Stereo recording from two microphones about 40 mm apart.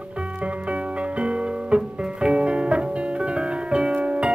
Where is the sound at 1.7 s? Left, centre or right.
Right.